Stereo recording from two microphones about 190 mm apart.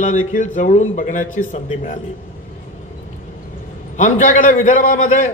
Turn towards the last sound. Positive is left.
turn(degrees=40)  # may be behind; listen again after turning